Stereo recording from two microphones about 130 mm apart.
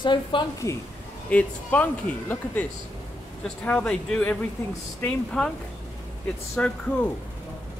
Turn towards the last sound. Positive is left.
turn(degrees=10)  # may be behind; listen again after turning